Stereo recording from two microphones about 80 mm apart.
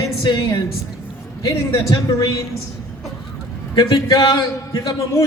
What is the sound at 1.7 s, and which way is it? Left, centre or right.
Speech, left.